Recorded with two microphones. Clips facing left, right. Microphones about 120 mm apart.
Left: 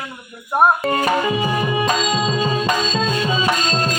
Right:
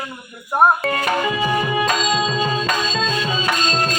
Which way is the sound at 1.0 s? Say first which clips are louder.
Left 2 dB; 15° left (ahead or behind).